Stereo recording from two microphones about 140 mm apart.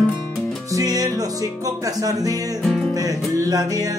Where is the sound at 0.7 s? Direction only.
25° right (ahead or behind).